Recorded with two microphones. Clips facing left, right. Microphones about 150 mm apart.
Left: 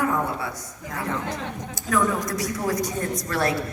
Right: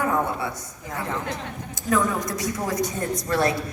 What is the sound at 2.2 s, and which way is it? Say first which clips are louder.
Speech: left 1 dB; 20° right (ahead or behind).